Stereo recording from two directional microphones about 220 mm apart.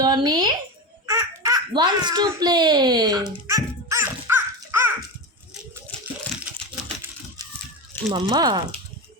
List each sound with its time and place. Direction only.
0.0 s a sound: 20° right (ahead or behind)
1.0 s baby laughter: 15° right (ahead or behind)
2.3 s a child's voice: 20° right (ahead or behind)
8.1 s speech: 20° right (ahead or behind)